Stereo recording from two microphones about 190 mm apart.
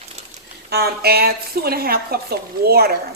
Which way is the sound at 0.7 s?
55° right (ahead or behind).